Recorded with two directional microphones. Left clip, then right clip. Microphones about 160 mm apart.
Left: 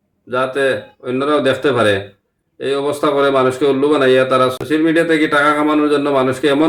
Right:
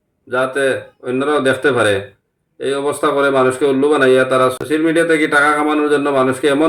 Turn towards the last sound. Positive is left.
turn(degrees=0)  # may be behind; listen again after turning